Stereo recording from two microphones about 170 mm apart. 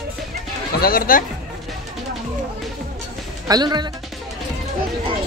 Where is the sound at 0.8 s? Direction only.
60° left (ahead or behind).